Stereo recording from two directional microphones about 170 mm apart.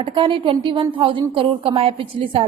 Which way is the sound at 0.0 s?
30° right (ahead or behind).